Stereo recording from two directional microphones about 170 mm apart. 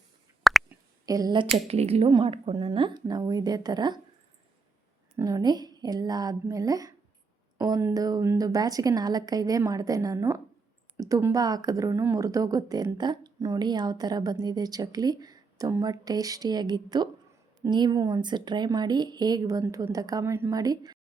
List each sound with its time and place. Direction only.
0.7 s a sound: 20° right (ahead or behind)
1.6 s speech: 35° right (ahead or behind)
5.1 s speech: 20° right (ahead or behind)